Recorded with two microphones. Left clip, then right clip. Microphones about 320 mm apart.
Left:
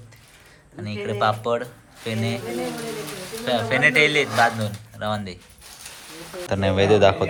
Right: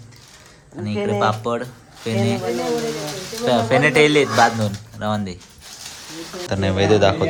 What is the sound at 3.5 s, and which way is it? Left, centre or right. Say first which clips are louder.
Speech: right 3 dB; centre.